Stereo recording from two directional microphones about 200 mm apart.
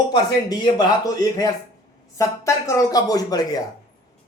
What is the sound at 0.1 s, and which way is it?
A man's voice, 20° left (ahead or behind).